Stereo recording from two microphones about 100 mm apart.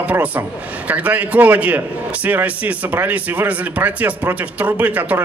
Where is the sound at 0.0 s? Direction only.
15° right (ahead or behind).